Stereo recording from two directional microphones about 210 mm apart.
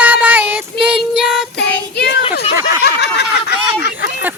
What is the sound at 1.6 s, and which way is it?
Child singing, 50° left (ahead or behind).